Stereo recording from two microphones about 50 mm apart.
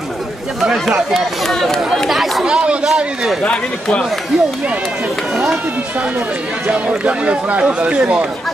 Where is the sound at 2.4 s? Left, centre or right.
Right.